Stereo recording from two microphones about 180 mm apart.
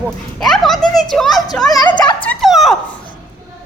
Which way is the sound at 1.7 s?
25° left (ahead or behind).